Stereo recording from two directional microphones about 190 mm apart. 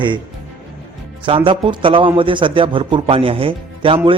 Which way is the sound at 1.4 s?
25° right (ahead or behind).